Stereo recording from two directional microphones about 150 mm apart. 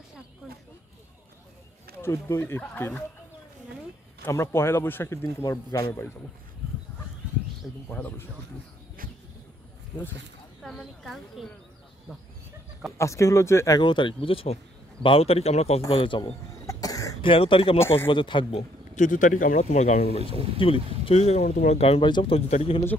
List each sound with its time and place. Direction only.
2.0 s speech: 15° left (ahead or behind)
4.2 s speech: 15° left (ahead or behind)
7.6 s a woman's voice: 5° left (ahead or behind)
10.6 s a woman's voice: centre (ahead or behind)
12.9 s speech: 20° left (ahead or behind); by 16.3 s 35° left (ahead or behind)
16.6 s cough: 20° left (ahead or behind)
17.2 s speech: 35° left (ahead or behind)
18.9 s a man's voice: 60° left (ahead or behind)
20.6 s speech: 35° left (ahead or behind)
21.0 s speech: 45° left (ahead or behind)